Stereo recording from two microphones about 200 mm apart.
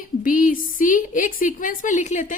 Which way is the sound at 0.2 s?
45° left (ahead or behind).